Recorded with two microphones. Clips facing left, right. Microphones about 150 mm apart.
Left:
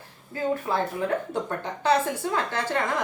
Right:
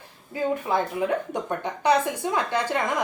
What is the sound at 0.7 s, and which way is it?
Speech, 15° right (ahead or behind).